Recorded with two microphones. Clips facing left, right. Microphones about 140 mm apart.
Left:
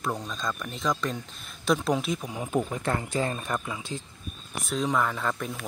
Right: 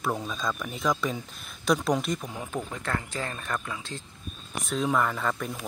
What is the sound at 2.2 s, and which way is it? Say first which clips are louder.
Speech: left 5 dB; 15° left (ahead or behind).